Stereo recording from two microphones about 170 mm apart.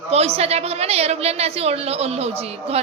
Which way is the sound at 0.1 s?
35° right (ahead or behind).